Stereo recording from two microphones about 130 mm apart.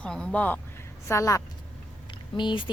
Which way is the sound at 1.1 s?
25° left (ahead or behind).